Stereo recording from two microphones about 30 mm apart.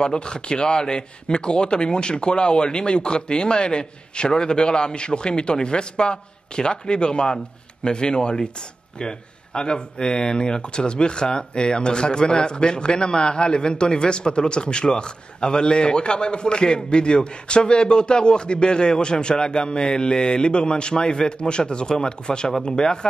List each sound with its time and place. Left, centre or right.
0.0 s a man's voice: left